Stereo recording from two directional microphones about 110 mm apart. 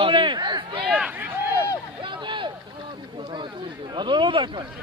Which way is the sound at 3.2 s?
45° right (ahead or behind).